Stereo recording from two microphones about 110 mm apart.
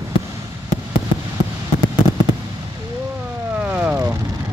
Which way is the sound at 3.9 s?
25° right (ahead or behind).